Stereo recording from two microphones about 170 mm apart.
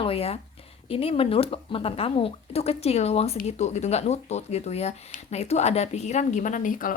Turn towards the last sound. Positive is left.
turn(degrees=55)  # may be behind; listen again after turning